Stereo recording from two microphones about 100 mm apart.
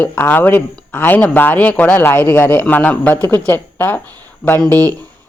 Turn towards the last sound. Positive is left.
turn(degrees=15)  # may be behind; listen again after turning